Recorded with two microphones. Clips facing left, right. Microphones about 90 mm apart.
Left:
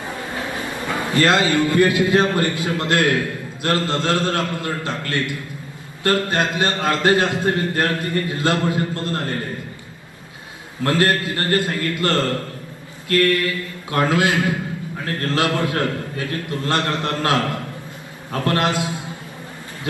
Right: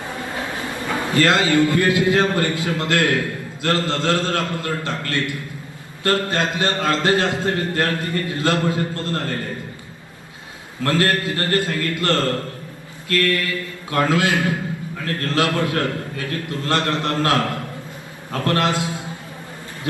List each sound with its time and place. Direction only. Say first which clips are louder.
1.1 s a man's voice: even; 20° left (ahead or behind)
10.8 s a man's voice: left 1 dB; 20° left (ahead or behind)